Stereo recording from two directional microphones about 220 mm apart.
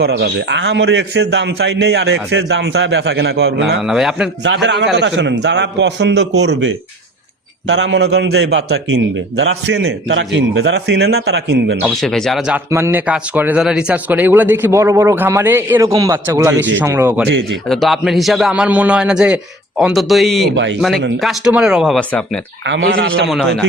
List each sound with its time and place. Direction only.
0.0 s a man's voice: 50° right (ahead or behind)
3.8 s a man's voice: centre (ahead or behind)
4.4 s a man's voice: 55° right (ahead or behind)
11.9 s a man's voice: centre (ahead or behind)
22.6 s speech: 55° right (ahead or behind)
23.3 s a man's voice: centre (ahead or behind)